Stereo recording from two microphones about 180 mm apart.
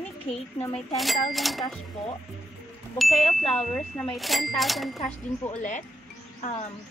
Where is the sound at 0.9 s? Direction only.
Centre (ahead or behind).